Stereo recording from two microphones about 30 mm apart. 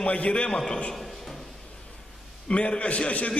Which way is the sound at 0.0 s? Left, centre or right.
Left.